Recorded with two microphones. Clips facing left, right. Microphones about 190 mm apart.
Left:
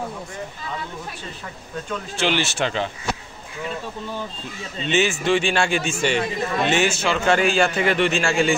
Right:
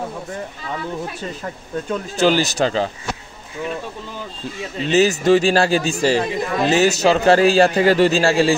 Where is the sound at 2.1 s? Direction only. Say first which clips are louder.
Right 6 dB; 40° right (ahead or behind).